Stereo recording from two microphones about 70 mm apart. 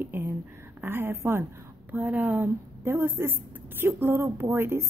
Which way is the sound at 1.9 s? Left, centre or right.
Right.